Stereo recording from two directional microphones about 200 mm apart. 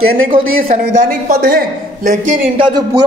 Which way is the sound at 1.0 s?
50° right (ahead or behind).